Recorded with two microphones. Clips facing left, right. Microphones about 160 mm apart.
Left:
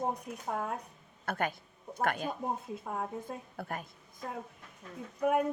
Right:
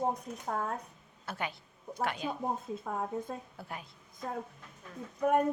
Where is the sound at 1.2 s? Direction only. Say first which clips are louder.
Left 5 dB; 50° left (ahead or behind).